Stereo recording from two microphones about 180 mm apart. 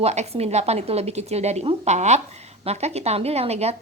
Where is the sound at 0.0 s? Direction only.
35° right (ahead or behind).